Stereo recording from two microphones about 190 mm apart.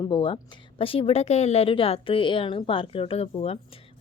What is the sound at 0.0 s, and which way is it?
Speech, 25° left (ahead or behind).